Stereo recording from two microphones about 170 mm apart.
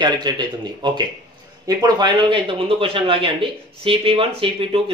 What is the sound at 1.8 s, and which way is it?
Speech, 25° right (ahead or behind).